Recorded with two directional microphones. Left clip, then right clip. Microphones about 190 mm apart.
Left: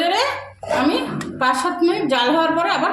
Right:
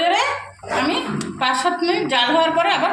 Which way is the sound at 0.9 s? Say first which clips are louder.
Left 1 dB; 50° left (ahead or behind).